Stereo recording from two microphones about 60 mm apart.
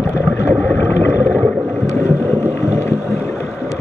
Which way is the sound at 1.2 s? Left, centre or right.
Left.